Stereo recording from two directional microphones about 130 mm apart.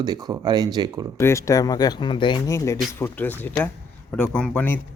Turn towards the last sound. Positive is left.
turn(degrees=15)  # may be behind; listen again after turning